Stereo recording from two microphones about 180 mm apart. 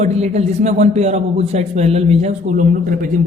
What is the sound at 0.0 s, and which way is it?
A man's voice, 35° right (ahead or behind).